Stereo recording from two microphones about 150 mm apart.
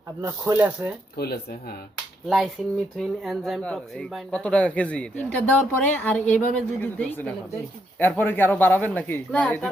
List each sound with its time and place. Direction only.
0.2 s speech: 20° right (ahead or behind)
1.1 s speech: 90° left
2.6 s speech: centre (ahead or behind)